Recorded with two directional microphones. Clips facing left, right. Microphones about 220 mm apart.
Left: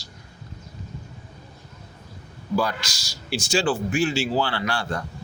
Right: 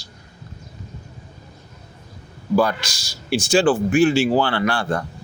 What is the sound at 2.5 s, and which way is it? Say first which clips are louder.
A man's voice: right 6 dB; 55° right (ahead or behind).